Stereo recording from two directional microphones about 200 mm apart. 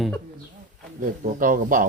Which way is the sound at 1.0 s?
40° right (ahead or behind).